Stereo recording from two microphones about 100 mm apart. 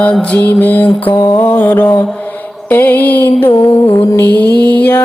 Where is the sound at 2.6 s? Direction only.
20° left (ahead or behind).